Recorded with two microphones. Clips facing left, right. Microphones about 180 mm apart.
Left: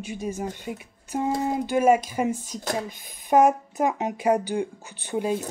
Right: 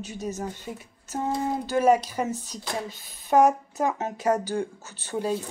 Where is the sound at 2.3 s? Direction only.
45° left (ahead or behind).